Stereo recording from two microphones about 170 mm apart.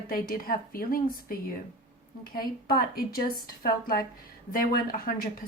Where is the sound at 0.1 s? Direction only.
60° left (ahead or behind).